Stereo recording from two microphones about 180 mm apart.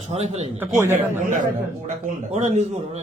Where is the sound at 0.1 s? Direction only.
40° right (ahead or behind).